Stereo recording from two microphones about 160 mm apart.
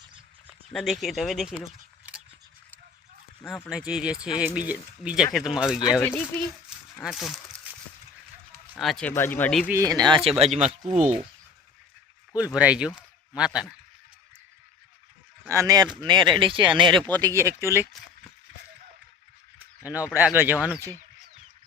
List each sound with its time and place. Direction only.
0.7 s speech: centre (ahead or behind)
3.7 s speech: 5° right (ahead or behind)
6.3 s speech: 10° left (ahead or behind)
8.7 s speech: 5° left (ahead or behind)
9.6 s speech: 20° right (ahead or behind)
10.2 s speech: 40° right (ahead or behind)
12.4 s speech: 5° right (ahead or behind)
15.4 s speech: 20° right (ahead or behind)
19.5 s speech: 10° right (ahead or behind)